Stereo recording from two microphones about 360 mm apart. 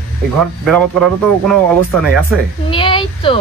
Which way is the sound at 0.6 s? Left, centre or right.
Centre.